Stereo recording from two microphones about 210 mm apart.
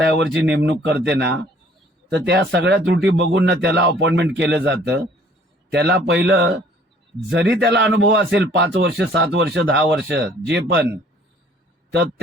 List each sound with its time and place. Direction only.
0.1 s speech: 60° right (ahead or behind)